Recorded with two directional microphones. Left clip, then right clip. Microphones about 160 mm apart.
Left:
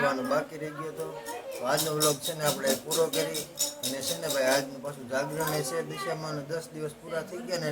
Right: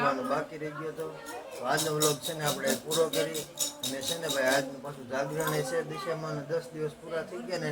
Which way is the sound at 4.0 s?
15° left (ahead or behind).